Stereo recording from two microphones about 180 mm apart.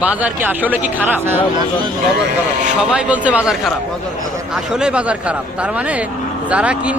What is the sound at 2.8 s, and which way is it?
Speech, 5° right (ahead or behind).